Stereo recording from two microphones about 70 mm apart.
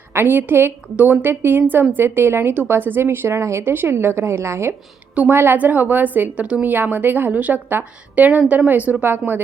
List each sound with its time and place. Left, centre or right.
0.1 s a woman's voice: right
3.6 s a woman's voice: right